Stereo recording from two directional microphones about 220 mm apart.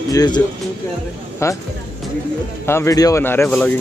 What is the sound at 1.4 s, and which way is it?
Speech, 15° left (ahead or behind).